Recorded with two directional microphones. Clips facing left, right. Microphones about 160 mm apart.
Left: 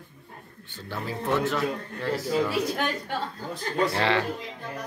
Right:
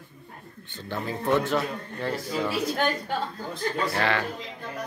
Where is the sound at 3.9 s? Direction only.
25° left (ahead or behind).